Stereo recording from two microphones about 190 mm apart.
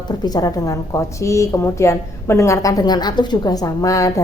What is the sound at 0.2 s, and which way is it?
A woman's voice, 20° left (ahead or behind).